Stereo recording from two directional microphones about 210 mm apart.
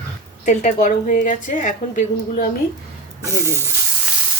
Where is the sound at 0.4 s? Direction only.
35° left (ahead or behind).